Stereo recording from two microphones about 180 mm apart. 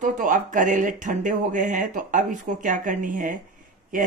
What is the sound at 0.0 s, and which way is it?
Speech, 45° right (ahead or behind).